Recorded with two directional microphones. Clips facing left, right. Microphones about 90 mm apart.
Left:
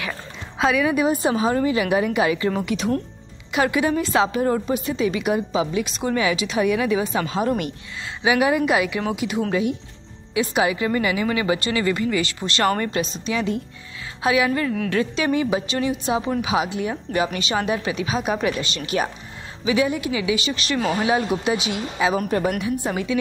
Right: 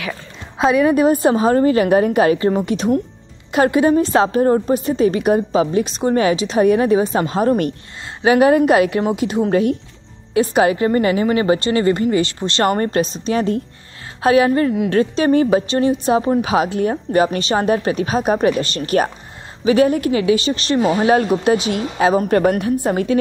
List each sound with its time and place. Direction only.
0.7 s a woman's voice: 45° right (ahead or behind)
9.5 s a woman's voice: 50° right (ahead or behind); by 12.8 s 30° right (ahead or behind)
12.8 s a woman's voice: 40° right (ahead or behind)
21.0 s a woman's voice: 50° right (ahead or behind)